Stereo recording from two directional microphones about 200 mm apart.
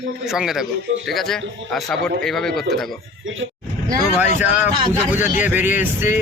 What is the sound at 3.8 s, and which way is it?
Speech, 20° right (ahead or behind).